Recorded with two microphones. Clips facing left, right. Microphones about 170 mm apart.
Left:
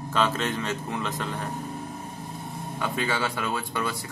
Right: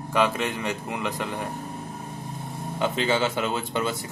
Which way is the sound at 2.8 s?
20° right (ahead or behind).